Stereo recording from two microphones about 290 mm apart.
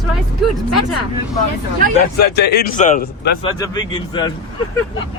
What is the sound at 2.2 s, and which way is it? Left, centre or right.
A man's voice, left.